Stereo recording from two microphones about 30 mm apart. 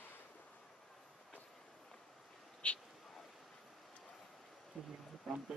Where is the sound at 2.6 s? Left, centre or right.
Left.